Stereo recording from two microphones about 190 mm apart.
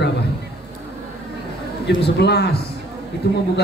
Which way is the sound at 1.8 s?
60° left (ahead or behind).